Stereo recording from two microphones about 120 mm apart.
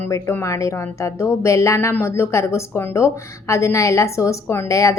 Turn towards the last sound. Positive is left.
turn(degrees=25)  # may be behind; listen again after turning